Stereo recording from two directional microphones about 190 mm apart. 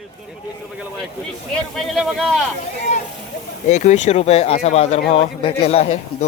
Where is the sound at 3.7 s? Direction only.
40° left (ahead or behind).